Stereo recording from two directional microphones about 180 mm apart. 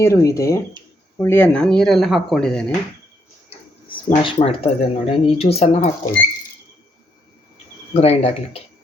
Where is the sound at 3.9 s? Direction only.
30° left (ahead or behind).